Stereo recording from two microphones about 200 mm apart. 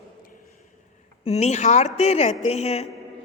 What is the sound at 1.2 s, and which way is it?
A man's voice, 30° left (ahead or behind).